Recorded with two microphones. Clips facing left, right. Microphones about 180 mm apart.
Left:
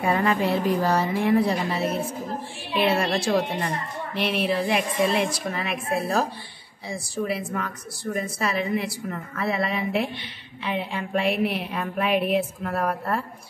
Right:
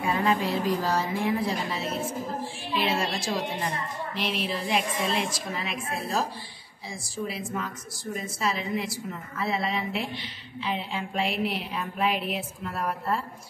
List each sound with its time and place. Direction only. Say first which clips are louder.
0.0 s a woman's voice: left 3 dB; 60° left (ahead or behind)